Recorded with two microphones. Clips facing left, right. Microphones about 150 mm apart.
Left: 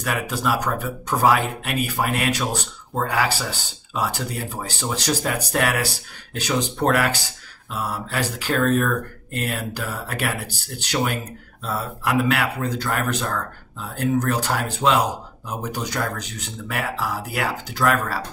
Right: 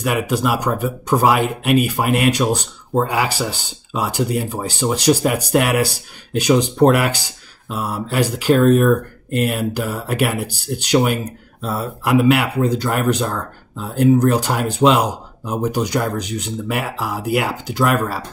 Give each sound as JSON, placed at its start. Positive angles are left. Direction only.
{"t": 0.0, "sound": "speech", "side_deg": -15}